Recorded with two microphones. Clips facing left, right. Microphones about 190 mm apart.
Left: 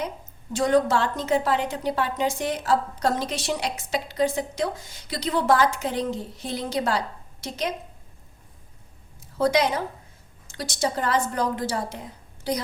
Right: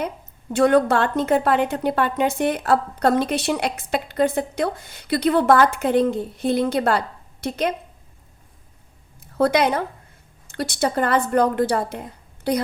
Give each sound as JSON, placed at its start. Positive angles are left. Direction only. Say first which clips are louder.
{"t": 0.5, "sound": "a woman's voice", "louder": "right 4 dB", "side_deg": -60}
{"t": 9.2, "sound": "a woman's voice", "louder": "right 3 dB", "side_deg": -60}